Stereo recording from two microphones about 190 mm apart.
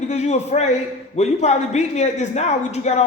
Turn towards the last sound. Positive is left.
turn(degrees=35)  # may be behind; listen again after turning